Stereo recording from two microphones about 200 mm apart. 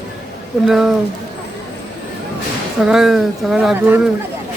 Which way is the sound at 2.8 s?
Centre (ahead or behind).